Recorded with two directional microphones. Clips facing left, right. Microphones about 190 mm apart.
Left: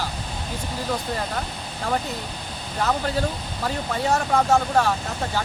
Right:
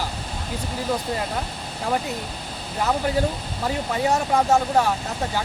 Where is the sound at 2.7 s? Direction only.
10° right (ahead or behind).